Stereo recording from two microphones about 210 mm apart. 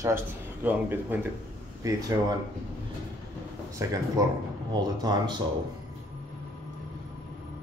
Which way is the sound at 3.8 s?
15° right (ahead or behind).